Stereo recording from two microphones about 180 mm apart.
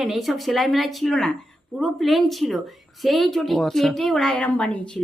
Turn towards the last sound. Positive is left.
turn(degrees=5)  # may be behind; listen again after turning